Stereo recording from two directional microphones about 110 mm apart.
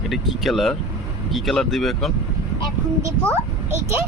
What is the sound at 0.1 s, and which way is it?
Speech, centre (ahead or behind).